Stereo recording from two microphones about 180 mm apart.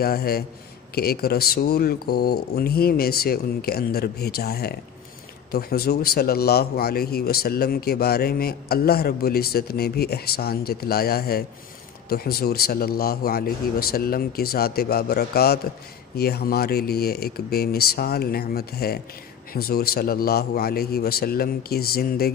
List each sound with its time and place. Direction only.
0.0 s a man's voice: 60° left (ahead or behind)